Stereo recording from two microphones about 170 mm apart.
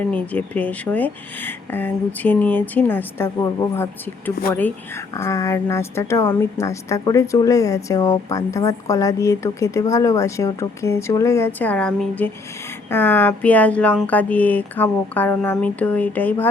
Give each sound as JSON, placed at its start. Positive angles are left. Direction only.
{"t": 0.1, "sound": "a woman's voice", "side_deg": 10}
{"t": 5.1, "sound": "a woman's voice", "side_deg": 20}